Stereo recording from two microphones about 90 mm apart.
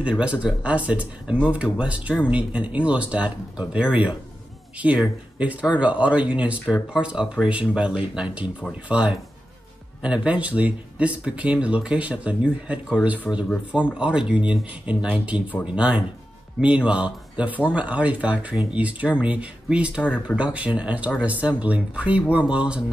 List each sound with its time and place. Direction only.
0.0 s speech: 10° right (ahead or behind)